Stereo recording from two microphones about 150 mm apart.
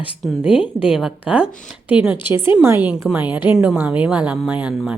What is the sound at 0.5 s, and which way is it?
Speech, 35° left (ahead or behind).